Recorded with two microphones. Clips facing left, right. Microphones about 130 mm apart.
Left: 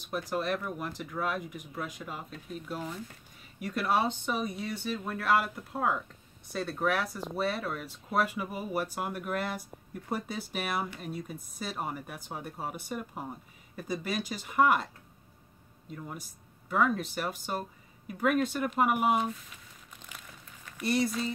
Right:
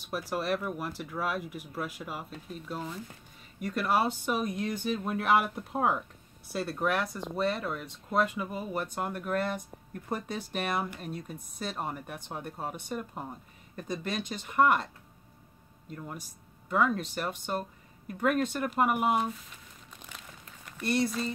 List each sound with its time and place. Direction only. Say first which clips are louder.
0.0 s speech: even; 5° right (ahead or behind); by 5.9 s 25° right (ahead or behind)
6.5 s speech: even; 5° right (ahead or behind)
15.9 s speech: even; centre (ahead or behind)
20.7 s speech: even; centre (ahead or behind)